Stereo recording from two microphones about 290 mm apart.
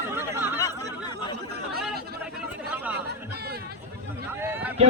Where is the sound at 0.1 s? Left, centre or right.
Centre.